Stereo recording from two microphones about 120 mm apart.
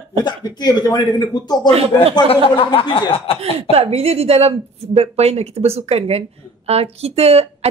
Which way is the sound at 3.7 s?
55° right (ahead or behind).